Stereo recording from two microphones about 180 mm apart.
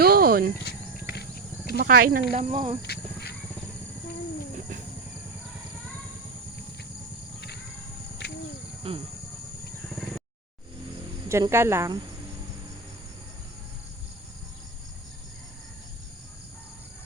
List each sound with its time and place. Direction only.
0.0 s cricket: 55° right (ahead or behind)
0.6 s insect: 65° left (ahead or behind)
1.7 s speech: 55° right (ahead or behind); by 2.7 s 40° right (ahead or behind)
2.8 s wild animals: 65° left (ahead or behind)
8.2 s cricket: 70° left (ahead or behind)
8.9 s speech: 30° right (ahead or behind)
9.9 s wild animals: centre (ahead or behind)
11.3 s speech: 15° right (ahead or behind)